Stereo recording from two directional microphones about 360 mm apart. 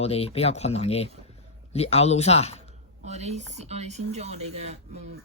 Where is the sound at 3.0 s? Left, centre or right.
Centre.